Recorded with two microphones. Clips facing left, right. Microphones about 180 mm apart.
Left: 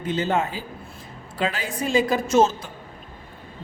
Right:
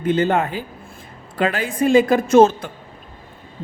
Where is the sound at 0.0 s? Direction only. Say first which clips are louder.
Right 5 dB; 55° right (ahead or behind).